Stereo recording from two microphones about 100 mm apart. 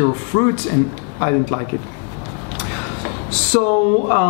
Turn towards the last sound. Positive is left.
turn(degrees=20)  # may be behind; listen again after turning